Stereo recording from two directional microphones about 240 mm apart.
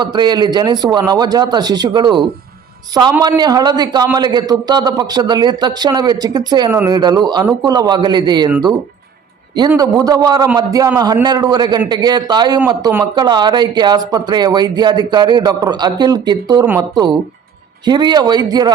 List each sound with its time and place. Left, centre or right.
0.0 s a man's voice: centre
9.6 s a man's voice: centre